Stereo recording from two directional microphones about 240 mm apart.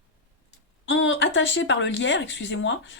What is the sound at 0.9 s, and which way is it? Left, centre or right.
Speech, left.